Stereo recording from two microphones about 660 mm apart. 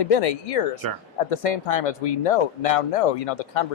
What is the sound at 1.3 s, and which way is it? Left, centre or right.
Speech, left.